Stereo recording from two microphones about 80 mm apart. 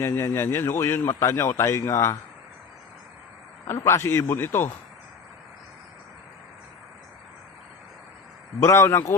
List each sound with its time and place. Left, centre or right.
0.0 s speech: left
3.8 s speech: left
8.6 s speech: left